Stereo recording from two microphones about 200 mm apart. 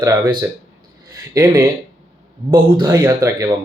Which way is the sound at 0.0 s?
20° right (ahead or behind).